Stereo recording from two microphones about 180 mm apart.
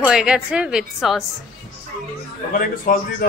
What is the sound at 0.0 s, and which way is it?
A woman's voice, 5° right (ahead or behind).